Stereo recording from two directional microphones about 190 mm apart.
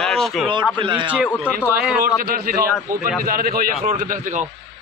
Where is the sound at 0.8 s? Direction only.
25° right (ahead or behind).